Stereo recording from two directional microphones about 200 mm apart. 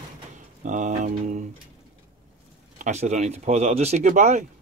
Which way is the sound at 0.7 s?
40° right (ahead or behind).